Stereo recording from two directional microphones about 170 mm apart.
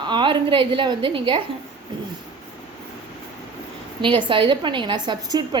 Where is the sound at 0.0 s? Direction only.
30° right (ahead or behind).